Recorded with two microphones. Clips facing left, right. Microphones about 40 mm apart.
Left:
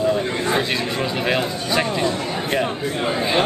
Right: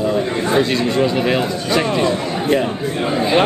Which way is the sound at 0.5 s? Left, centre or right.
Centre.